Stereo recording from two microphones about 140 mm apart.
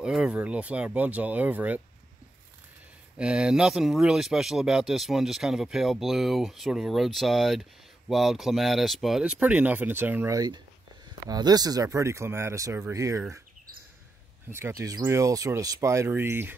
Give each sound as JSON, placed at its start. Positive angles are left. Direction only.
{"t": 0.0, "sound": "speech", "side_deg": -5}
{"t": 3.2, "sound": "speech", "side_deg": -5}
{"t": 14.5, "sound": "speech", "side_deg": -20}